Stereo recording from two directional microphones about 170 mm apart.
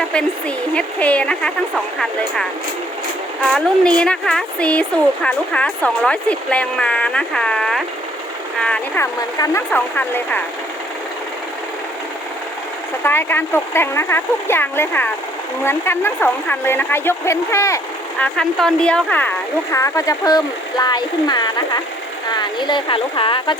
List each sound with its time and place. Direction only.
0.1 s speech: 5° left (ahead or behind)
3.5 s speech: 5° left (ahead or behind)
13.0 s speech: 15° left (ahead or behind)
18.2 s speech: 5° left (ahead or behind)
19.7 s speech: 20° left (ahead or behind)